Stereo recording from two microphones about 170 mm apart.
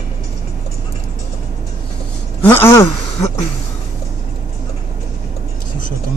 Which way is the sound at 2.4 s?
15° left (ahead or behind).